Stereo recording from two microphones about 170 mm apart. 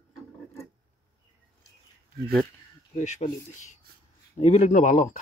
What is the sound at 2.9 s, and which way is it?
Speech, 45° left (ahead or behind).